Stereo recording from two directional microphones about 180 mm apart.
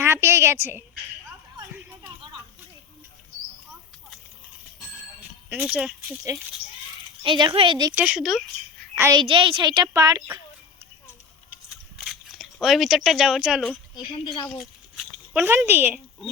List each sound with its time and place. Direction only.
0.0 s a sound: 15° right (ahead or behind)
5.5 s speech: 5° right (ahead or behind)
7.2 s a woman's voice: 25° right (ahead or behind)
7.9 s speech: 5° right (ahead or behind)
9.0 s a woman's voice: 15° right (ahead or behind)
9.2 s a woman's voice: 30° right (ahead or behind)
11.7 s a sound: centre (ahead or behind)